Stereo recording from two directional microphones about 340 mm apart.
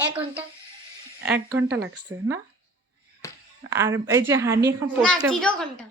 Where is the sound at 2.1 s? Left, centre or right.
Right.